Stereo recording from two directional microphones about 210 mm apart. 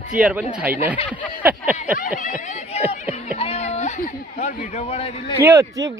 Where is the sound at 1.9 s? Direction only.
40° left (ahead or behind).